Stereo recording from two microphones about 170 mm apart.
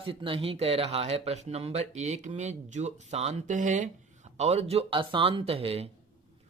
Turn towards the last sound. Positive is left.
turn(degrees=-35)  # may be behind; listen again after turning